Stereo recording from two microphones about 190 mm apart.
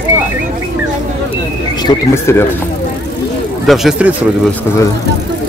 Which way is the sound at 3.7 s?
Centre (ahead or behind).